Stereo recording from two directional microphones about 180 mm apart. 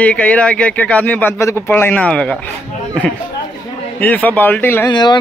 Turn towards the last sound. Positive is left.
turn(degrees=25)  # may be behind; listen again after turning